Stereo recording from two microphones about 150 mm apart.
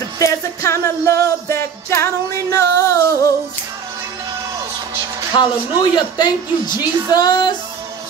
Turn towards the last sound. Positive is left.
turn(degrees=30)  # may be behind; listen again after turning